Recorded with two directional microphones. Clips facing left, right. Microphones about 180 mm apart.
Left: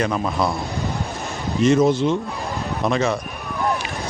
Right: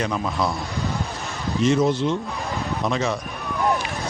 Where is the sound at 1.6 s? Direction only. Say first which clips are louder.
Left 3 dB; 50° left (ahead or behind).